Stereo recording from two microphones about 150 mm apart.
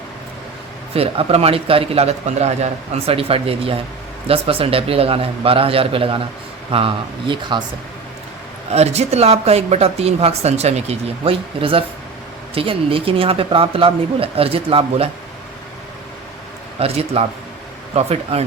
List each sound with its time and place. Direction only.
0.9 s a man's voice: 40° right (ahead or behind)
8.7 s a man's voice: 45° right (ahead or behind)
16.8 s speech: 45° right (ahead or behind)